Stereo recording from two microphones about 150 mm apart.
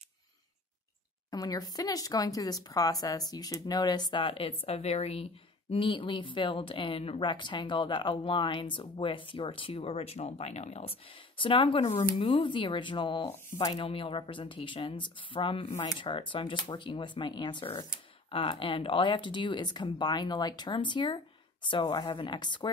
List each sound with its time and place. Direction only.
1.3 s speech: 25° left (ahead or behind)